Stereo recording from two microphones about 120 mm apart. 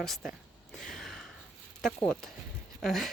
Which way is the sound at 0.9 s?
5° left (ahead or behind).